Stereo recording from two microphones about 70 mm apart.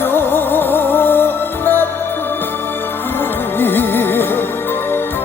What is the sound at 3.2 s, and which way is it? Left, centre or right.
Music, left.